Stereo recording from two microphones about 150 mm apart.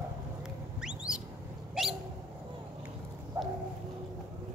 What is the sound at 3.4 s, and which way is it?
Clip-clop, 20° right (ahead or behind).